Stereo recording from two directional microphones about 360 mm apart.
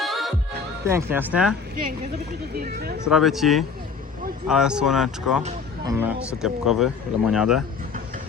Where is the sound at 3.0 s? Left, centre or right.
Centre.